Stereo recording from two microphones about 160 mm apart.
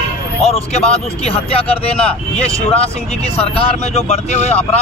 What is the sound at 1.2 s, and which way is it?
Speech, 35° left (ahead or behind).